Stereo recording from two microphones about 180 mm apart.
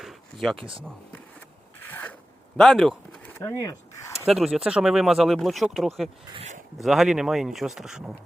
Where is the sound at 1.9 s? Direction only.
10° left (ahead or behind).